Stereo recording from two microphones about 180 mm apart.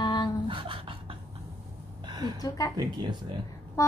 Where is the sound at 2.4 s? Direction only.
20° left (ahead or behind).